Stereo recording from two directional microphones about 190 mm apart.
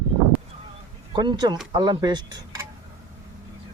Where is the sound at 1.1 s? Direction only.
25° right (ahead or behind).